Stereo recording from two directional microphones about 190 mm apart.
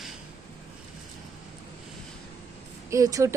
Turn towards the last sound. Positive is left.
turn(degrees=-15)  # may be behind; listen again after turning